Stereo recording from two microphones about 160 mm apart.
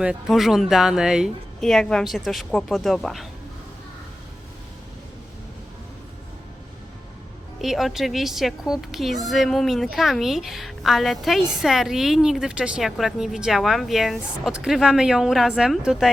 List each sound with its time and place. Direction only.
0.0 s speech: 5° right (ahead or behind)
7.6 s speech: centre (ahead or behind)